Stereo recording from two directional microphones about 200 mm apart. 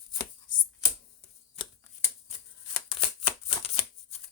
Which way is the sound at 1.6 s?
25° left (ahead or behind).